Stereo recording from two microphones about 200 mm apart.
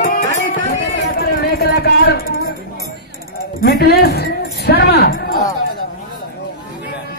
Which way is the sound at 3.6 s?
50° left (ahead or behind).